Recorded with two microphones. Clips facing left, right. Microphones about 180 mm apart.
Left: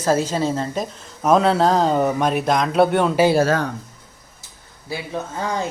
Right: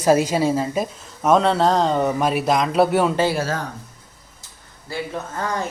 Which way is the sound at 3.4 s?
65° left (ahead or behind).